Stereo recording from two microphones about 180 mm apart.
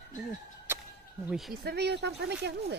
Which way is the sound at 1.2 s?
Centre (ahead or behind).